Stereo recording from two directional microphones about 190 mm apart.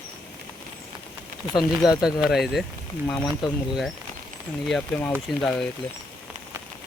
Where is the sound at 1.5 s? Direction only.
20° left (ahead or behind).